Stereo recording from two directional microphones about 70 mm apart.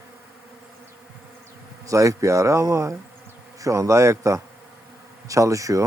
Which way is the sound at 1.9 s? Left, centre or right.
Right.